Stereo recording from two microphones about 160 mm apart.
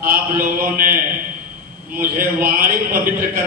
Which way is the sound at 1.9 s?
60° right (ahead or behind).